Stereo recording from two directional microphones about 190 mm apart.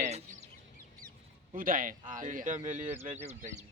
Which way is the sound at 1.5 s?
45° right (ahead or behind).